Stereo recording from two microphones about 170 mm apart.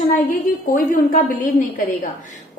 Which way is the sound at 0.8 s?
55° left (ahead or behind).